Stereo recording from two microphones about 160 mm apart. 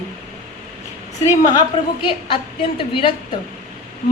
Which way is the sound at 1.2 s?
20° left (ahead or behind).